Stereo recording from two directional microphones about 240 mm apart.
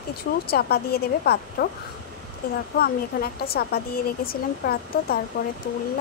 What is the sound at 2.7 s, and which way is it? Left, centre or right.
Speech, left.